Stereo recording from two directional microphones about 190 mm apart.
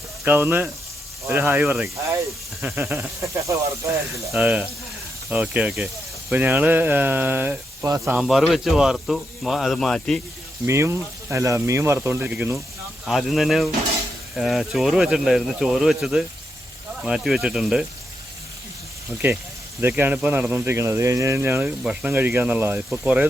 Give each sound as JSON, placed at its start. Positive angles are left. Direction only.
{"t": 0.3, "sound": "speech", "side_deg": -10}
{"t": 8.0, "sound": "speech", "side_deg": 0}
{"t": 10.7, "sound": "speech", "side_deg": -15}
{"t": 19.8, "sound": "speech", "side_deg": -10}